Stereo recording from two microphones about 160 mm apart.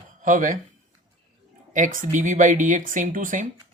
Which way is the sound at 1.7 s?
55° right (ahead or behind).